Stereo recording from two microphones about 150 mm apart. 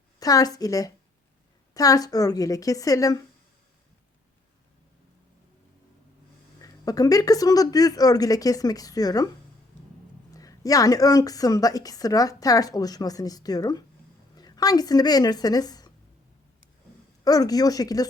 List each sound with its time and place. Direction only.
0.2 s a woman's voice: 25° left (ahead or behind)
6.6 s a woman's voice: 25° left (ahead or behind)
10.3 s a woman's voice: 25° left (ahead or behind)
17.2 s a woman's voice: 25° left (ahead or behind)